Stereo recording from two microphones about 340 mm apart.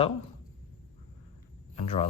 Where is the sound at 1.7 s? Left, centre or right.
Centre.